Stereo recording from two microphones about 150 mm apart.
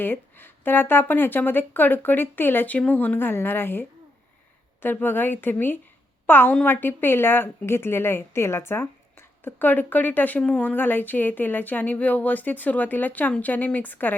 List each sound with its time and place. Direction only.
0.0 s a woman's voice: 15° left (ahead or behind)